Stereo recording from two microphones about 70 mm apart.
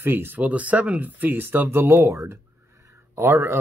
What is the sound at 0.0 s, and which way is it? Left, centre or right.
Speech, right.